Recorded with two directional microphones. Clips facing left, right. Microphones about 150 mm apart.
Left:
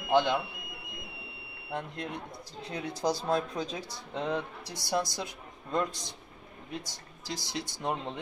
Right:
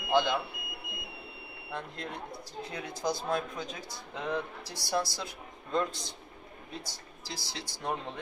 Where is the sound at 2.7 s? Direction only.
35° left (ahead or behind).